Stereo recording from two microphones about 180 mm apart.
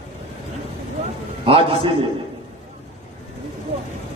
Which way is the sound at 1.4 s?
30° right (ahead or behind).